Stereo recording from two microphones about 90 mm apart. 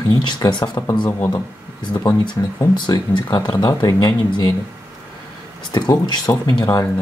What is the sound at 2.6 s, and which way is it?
Speech, 40° left (ahead or behind).